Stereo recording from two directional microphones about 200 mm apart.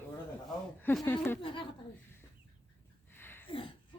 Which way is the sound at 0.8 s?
5° left (ahead or behind).